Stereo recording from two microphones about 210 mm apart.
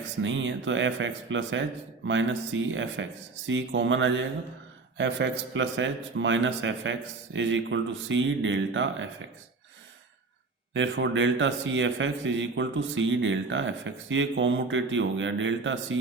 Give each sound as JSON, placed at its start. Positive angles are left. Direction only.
{"t": 0.2, "sound": "a man's voice", "side_deg": -65}
{"t": 10.8, "sound": "a man's voice", "side_deg": -60}